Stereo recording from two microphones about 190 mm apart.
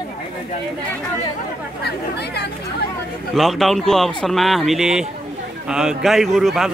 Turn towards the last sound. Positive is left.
turn(degrees=0)  # may be behind; listen again after turning